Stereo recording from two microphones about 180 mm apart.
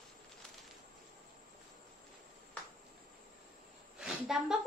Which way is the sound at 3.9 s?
5° right (ahead or behind).